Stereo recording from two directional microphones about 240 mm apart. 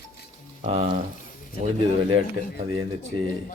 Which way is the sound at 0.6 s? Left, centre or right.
Right.